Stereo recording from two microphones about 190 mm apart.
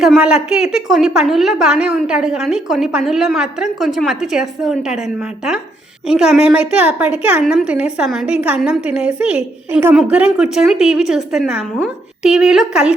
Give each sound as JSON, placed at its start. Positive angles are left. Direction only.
{"t": 0.0, "sound": "a woman's voice", "side_deg": -5}
{"t": 6.1, "sound": "a woman's voice", "side_deg": -5}